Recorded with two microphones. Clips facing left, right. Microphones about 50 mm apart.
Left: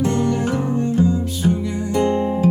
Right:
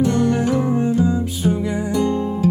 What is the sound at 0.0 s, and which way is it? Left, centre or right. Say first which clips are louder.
Music: right 2 dB; left.